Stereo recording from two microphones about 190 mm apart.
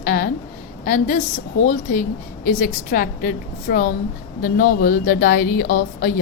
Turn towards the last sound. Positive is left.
turn(degrees=50)  # may be behind; listen again after turning